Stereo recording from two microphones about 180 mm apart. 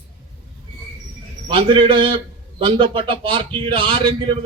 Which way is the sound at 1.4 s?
30° right (ahead or behind).